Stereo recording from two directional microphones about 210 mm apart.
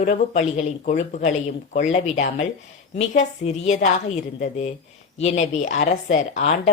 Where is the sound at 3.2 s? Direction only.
35° left (ahead or behind).